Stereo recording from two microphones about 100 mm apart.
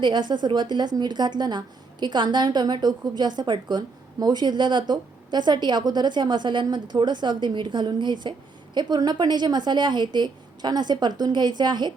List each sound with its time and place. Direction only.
0.0 s a woman's voice: 50° right (ahead or behind)